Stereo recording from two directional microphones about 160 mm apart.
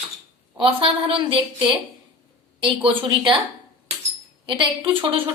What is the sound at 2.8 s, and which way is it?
Speech, 30° right (ahead or behind).